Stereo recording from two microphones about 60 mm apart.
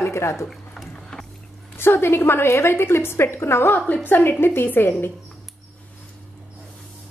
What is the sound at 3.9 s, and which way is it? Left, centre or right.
A woman's voice, left.